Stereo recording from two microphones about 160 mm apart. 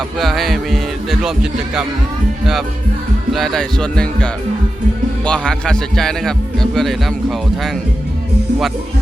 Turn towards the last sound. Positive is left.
turn(degrees=0)  # may be behind; listen again after turning